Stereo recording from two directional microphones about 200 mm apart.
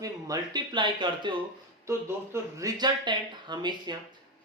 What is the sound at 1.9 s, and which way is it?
Speech, 15° right (ahead or behind).